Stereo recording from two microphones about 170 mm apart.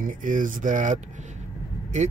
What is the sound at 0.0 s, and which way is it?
Speech, 50° right (ahead or behind).